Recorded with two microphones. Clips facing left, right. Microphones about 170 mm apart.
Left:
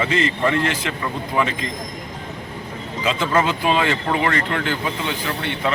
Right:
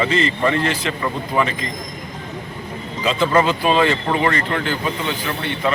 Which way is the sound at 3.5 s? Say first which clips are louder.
Right 3 dB; 15° left (ahead or behind).